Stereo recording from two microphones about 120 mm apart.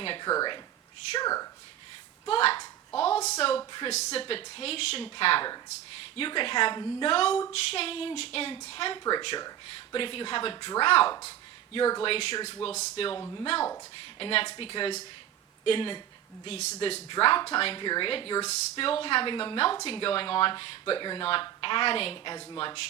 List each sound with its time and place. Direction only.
0.0 s speech: 50° left (ahead or behind)
0.3 s speech: 35° left (ahead or behind)
2.2 s a woman's voice: 50° left (ahead or behind)
4.2 s speech: 50° left (ahead or behind)
7.1 s speech: 55° left (ahead or behind)
11.3 s a sound: 50° left (ahead or behind)
12.0 s speech: 50° left (ahead or behind)
12.6 s speech: 60° left (ahead or behind)
13.1 s speech: 25° left (ahead or behind)
13.4 s speech: 50° left (ahead or behind)
16.5 s speech: 70° left (ahead or behind)
16.8 s speech: 50° left (ahead or behind)